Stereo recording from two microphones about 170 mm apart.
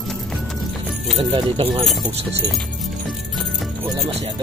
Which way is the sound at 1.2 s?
30° right (ahead or behind).